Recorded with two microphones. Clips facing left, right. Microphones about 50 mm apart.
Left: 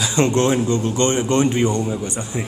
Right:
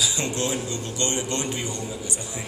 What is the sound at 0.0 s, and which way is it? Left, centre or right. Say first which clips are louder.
Speech: left 9 dB; left.